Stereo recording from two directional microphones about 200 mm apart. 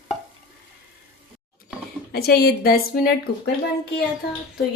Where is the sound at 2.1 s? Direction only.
50° left (ahead or behind).